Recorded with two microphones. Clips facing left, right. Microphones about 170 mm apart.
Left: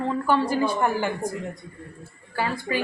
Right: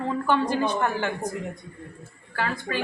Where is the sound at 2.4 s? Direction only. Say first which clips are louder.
Left 2 dB; 10° left (ahead or behind).